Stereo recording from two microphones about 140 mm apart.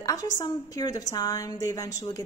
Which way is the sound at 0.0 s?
25° left (ahead or behind).